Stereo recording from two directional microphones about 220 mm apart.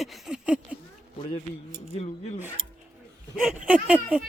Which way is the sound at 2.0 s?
30° left (ahead or behind).